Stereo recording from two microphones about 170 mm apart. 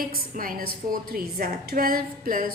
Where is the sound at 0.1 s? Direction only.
55° right (ahead or behind).